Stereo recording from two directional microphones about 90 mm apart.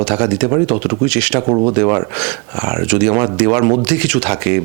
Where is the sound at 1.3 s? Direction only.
30° right (ahead or behind).